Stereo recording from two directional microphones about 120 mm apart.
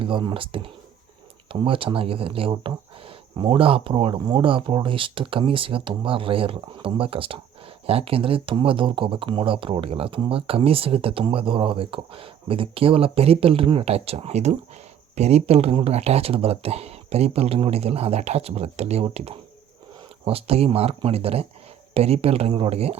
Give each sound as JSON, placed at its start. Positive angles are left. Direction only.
{"t": 0.0, "sound": "speech", "side_deg": -45}